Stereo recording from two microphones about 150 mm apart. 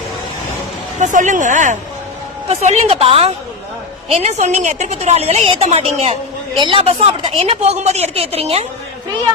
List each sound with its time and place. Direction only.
0.9 s speech: 55° right (ahead or behind)
2.5 s a woman's voice: 45° right (ahead or behind)
6.6 s a woman's voice: 35° right (ahead or behind)